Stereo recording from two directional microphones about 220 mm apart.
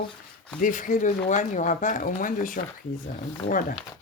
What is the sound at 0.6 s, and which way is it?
Speech, 35° left (ahead or behind).